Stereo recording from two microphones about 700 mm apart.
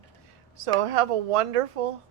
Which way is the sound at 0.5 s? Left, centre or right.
Right.